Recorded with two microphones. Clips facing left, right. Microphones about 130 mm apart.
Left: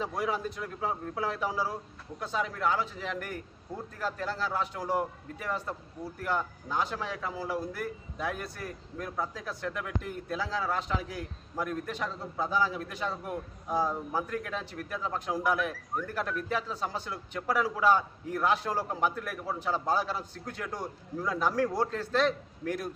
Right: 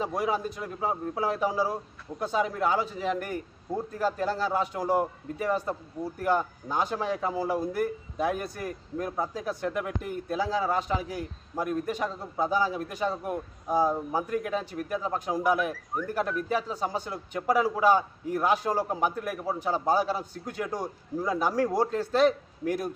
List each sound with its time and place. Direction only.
0.0 s speech: 10° right (ahead or behind)